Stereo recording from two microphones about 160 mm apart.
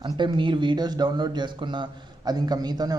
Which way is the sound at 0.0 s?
30° right (ahead or behind).